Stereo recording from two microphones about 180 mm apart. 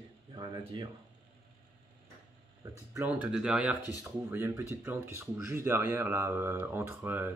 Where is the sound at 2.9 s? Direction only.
15° right (ahead or behind).